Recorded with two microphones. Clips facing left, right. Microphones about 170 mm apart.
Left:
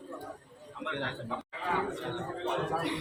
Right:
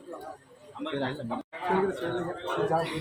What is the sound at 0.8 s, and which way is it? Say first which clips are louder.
Speech: right 5 dB; 30° right (ahead or behind).